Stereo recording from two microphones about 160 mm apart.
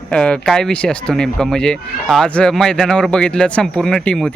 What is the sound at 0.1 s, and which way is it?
Speech, 5° left (ahead or behind).